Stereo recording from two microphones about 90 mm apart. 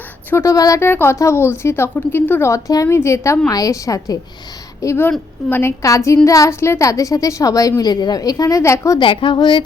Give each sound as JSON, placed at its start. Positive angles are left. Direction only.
{"t": 0.4, "sound": "a woman's voice", "side_deg": 40}
{"t": 0.8, "sound": "a woman's voice", "side_deg": 25}
{"t": 2.5, "sound": "a woman's voice", "side_deg": 35}
{"t": 5.5, "sound": "a woman's voice", "side_deg": 25}
{"t": 5.8, "sound": "a woman's voice", "side_deg": 35}
{"t": 9.0, "sound": "a woman's voice", "side_deg": 70}